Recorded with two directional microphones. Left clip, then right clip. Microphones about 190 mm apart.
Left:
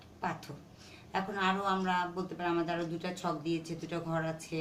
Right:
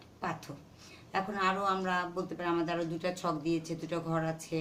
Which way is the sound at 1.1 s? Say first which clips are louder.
Right 1 dB; 50° right (ahead or behind).